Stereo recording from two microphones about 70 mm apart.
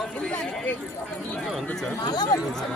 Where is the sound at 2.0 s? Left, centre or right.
Left.